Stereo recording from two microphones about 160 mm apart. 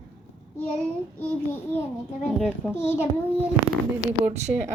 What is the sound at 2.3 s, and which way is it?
Speech, centre (ahead or behind).